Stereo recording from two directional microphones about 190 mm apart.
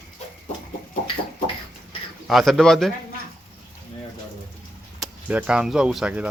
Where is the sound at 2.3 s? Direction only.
Centre (ahead or behind).